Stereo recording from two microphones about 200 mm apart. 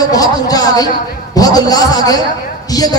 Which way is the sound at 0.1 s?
20° left (ahead or behind).